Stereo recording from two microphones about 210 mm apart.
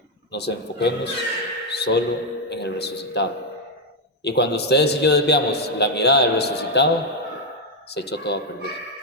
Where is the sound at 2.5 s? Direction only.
55° left (ahead or behind).